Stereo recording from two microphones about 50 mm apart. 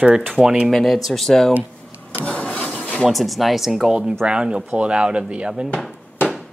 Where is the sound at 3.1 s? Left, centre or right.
Centre.